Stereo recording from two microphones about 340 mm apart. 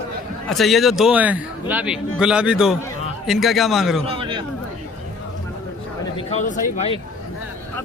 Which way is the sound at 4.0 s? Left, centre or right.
Centre.